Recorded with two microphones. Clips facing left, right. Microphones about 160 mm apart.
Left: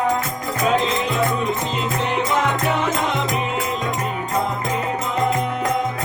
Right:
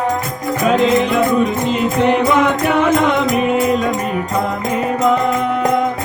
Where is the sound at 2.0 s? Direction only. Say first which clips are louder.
Right 8 dB; 60° right (ahead or behind).